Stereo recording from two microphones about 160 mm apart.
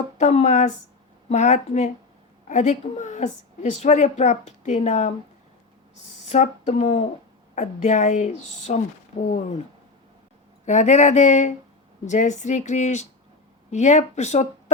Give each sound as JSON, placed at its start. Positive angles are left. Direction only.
{"t": 0.2, "sound": "a woman's voice", "side_deg": 45}
{"t": 6.2, "sound": "a woman's voice", "side_deg": 45}
{"t": 10.7, "sound": "a woman's voice", "side_deg": 45}